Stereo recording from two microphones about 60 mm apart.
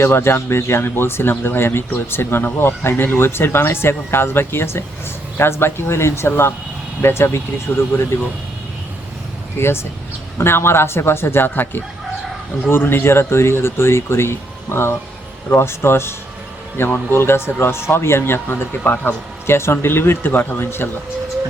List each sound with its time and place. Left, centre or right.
0.0 s speech: left
7.7 s speech: left
9.6 s speech: left